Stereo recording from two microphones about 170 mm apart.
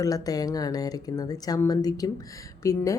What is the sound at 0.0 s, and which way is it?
A woman's voice, 20° left (ahead or behind).